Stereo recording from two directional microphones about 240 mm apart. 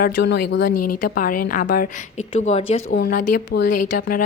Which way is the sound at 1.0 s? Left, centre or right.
Left.